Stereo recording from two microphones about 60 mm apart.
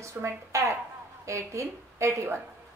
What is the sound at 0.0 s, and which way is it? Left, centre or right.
A woman's voice, right.